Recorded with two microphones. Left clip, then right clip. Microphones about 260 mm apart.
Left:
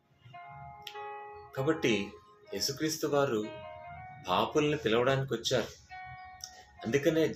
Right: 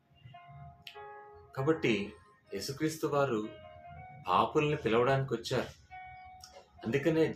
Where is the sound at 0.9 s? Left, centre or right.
Left.